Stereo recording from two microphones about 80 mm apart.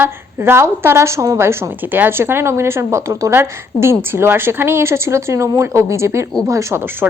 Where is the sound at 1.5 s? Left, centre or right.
Right.